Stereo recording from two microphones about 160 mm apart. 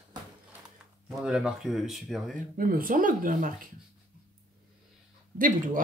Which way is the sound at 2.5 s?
60° right (ahead or behind).